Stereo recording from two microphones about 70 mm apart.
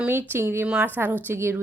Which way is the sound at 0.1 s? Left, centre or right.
Right.